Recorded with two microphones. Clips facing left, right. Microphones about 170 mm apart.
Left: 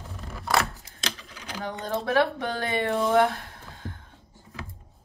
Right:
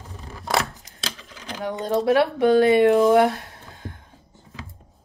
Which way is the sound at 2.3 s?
15° right (ahead or behind).